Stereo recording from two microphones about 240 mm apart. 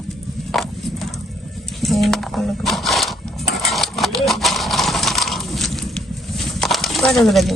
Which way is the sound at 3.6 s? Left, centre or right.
Centre.